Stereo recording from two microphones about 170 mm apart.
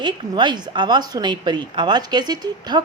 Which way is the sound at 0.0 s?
25° right (ahead or behind).